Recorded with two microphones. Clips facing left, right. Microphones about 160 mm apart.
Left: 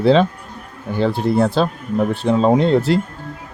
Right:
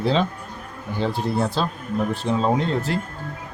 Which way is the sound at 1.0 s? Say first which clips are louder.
Left 7 dB; 60° left (ahead or behind).